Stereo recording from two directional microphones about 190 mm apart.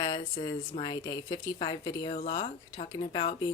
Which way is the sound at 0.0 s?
25° left (ahead or behind).